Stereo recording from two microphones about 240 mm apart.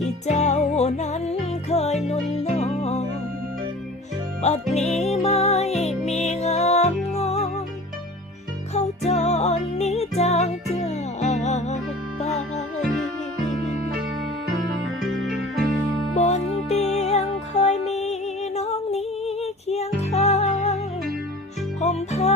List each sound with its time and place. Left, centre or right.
0.0 s music: left
4.7 s music: left
8.7 s music: left
14.7 s music: right
16.1 s music: left
21.8 s music: left